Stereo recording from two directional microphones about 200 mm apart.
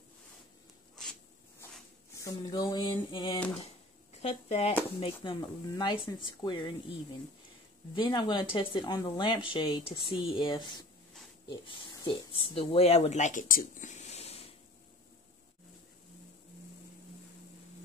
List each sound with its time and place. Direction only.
2.2 s a woman's voice: 20° left (ahead or behind)
7.9 s a woman's voice: 25° left (ahead or behind)